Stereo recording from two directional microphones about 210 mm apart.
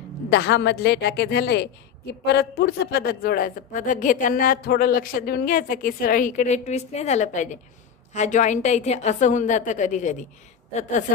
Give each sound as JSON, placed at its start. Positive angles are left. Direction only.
{"t": 0.3, "sound": "a woman's voice", "side_deg": 55}